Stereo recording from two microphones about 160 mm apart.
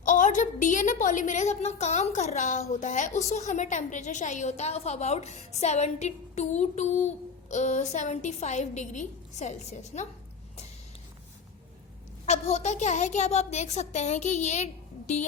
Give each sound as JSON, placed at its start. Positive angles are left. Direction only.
{"t": 0.0, "sound": "a woman's voice", "side_deg": 55}
{"t": 12.2, "sound": "a woman's voice", "side_deg": 45}